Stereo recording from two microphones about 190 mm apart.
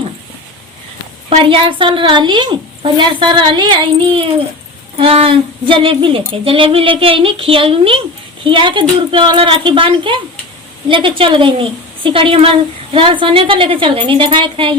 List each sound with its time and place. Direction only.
1.3 s a woman's voice: 30° right (ahead or behind)